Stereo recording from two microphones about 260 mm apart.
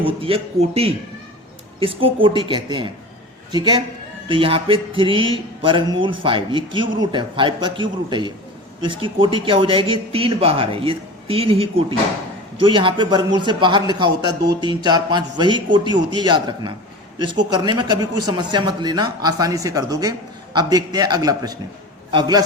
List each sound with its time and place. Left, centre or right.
0.2 s a man's voice: right